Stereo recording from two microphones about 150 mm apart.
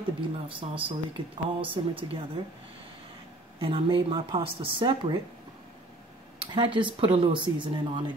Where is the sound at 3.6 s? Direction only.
35° right (ahead or behind).